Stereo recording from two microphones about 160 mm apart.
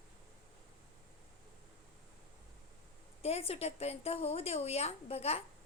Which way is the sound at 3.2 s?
40° left (ahead or behind).